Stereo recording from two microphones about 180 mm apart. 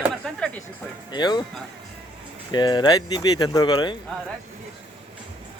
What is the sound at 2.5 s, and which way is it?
Speech, 25° left (ahead or behind).